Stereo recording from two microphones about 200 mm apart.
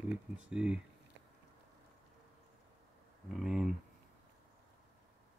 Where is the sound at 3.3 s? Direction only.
Centre (ahead or behind).